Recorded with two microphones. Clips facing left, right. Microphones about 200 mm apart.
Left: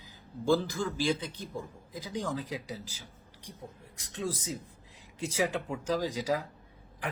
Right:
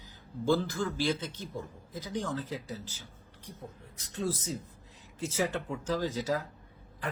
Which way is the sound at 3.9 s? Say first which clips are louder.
Right 4 dB; 75° left (ahead or behind).